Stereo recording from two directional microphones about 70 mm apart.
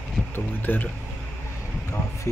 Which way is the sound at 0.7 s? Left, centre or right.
Left.